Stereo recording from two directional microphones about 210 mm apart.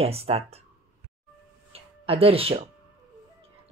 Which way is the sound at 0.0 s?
30° right (ahead or behind).